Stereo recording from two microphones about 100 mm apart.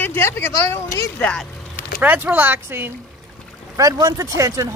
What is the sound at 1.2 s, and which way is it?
Speech, 10° left (ahead or behind).